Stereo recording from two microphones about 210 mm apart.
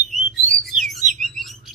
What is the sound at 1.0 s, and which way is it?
Bird, 35° right (ahead or behind).